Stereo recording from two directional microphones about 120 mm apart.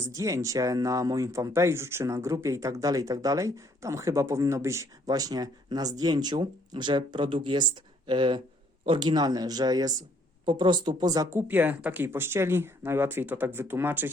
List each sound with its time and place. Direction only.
0.0 s speech: 25° right (ahead or behind)